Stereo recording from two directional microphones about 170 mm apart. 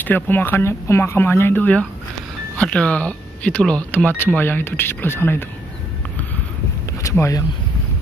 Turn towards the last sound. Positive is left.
turn(degrees=15)  # may be behind; listen again after turning